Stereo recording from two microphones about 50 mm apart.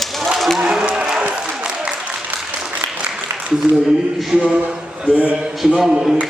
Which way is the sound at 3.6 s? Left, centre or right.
Centre.